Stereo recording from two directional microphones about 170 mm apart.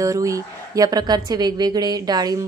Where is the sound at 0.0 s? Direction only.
20° right (ahead or behind).